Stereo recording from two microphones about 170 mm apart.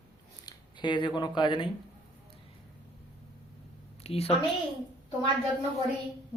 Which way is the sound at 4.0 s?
35° left (ahead or behind).